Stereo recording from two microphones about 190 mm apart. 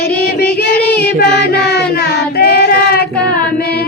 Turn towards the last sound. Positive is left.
turn(degrees=55)  # may be behind; listen again after turning